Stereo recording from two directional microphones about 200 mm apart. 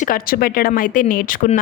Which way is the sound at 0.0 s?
45° left (ahead or behind).